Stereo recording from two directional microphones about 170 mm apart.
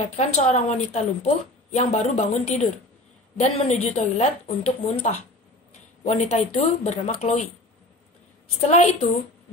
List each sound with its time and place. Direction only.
0.1 s a woman's voice: 40° left (ahead or behind)
6.0 s a woman's voice: 40° left (ahead or behind)
8.5 s a woman's voice: 40° left (ahead or behind)